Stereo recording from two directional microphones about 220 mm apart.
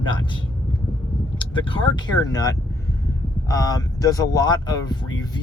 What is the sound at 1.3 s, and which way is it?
Speech, 25° left (ahead or behind).